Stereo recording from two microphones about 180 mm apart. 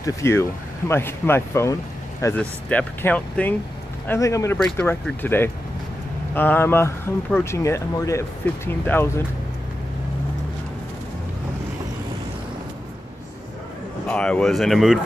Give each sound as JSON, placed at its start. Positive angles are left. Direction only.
{"t": 0.0, "sound": "speech", "side_deg": 15}
{"t": 14.0, "sound": "speech", "side_deg": 5}